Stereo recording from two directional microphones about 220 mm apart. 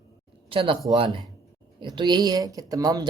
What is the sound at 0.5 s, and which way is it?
Speech, 25° right (ahead or behind).